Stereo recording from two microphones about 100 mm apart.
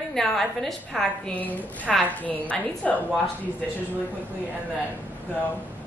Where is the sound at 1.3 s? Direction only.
15° left (ahead or behind).